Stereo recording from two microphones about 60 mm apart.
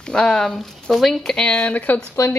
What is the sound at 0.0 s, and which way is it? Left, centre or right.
Speech, centre.